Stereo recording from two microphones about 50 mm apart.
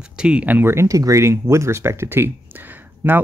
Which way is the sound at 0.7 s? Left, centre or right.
Right.